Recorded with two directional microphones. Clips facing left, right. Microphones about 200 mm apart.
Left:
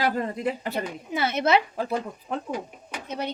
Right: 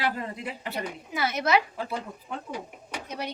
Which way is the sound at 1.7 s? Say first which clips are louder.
Left 5 dB; 45° left (ahead or behind).